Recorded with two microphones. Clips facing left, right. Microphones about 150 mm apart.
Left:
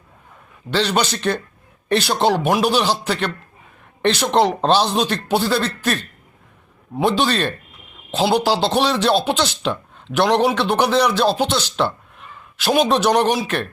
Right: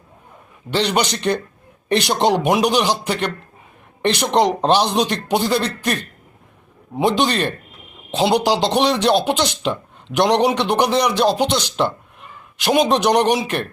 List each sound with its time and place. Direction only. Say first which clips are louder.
0.7 s speech: even; 15° right (ahead or behind)